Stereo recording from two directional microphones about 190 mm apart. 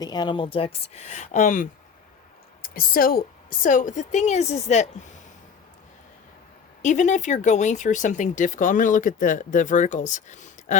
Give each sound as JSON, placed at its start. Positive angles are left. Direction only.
{"t": 0.0, "sound": "a woman's voice", "side_deg": 20}
{"t": 6.8, "sound": "speech", "side_deg": 40}